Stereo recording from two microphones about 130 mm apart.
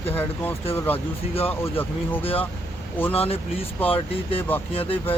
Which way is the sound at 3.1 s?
45° left (ahead or behind).